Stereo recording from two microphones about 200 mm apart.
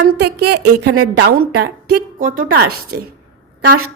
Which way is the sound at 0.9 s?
75° right (ahead or behind).